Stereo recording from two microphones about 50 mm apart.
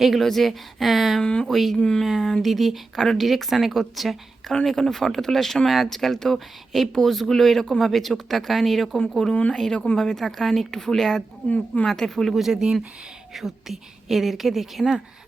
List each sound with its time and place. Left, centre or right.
0.0 s speech: centre
1.2 s a woman's voice: centre
1.5 s speech: centre
11.4 s a woman's voice: left
11.9 s speech: centre
12.4 s speech: centre